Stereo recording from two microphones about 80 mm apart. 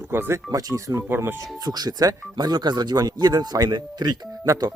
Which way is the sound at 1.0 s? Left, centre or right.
Right.